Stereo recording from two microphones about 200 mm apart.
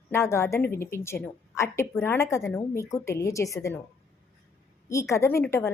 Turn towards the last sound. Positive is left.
turn(degrees=15)  # may be behind; listen again after turning